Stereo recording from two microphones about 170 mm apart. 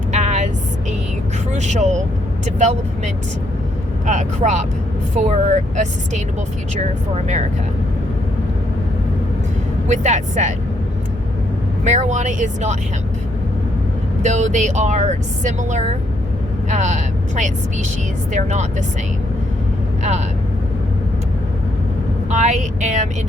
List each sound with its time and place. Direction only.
0.1 s vehicle: 45° right (ahead or behind)
1.5 s speech: 45° right (ahead or behind)
9.9 s speech: 45° right (ahead or behind)
11.9 s speech: 45° right (ahead or behind)
14.2 s speech: 45° right (ahead or behind)
20.0 s speech: 45° right (ahead or behind)
22.3 s speech: 45° right (ahead or behind)